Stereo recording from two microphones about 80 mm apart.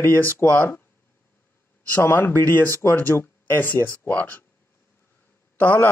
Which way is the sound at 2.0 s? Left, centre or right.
Left.